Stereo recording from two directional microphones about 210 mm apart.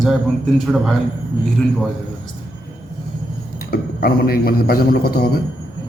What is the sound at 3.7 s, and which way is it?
A man's voice, 45° left (ahead or behind).